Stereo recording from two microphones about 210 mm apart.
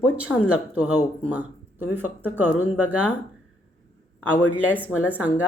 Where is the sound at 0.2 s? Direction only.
5° right (ahead or behind).